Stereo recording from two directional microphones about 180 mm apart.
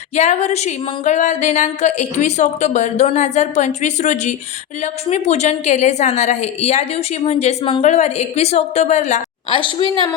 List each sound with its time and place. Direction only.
0.2 s a woman's voice: 40° left (ahead or behind)
9.5 s a woman's voice: 25° left (ahead or behind)